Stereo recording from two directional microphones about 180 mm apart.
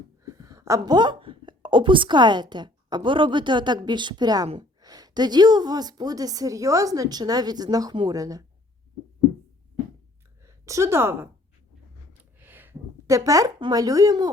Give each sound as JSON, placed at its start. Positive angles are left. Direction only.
{"t": 0.3, "sound": "a woman's voice", "side_deg": -20}
{"t": 10.4, "sound": "a woman's voice", "side_deg": -15}
{"t": 12.4, "sound": "speech", "side_deg": -10}